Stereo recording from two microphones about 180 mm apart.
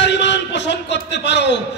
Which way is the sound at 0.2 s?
75° left (ahead or behind).